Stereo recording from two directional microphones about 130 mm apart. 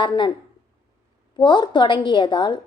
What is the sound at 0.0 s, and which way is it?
Speech, 40° left (ahead or behind).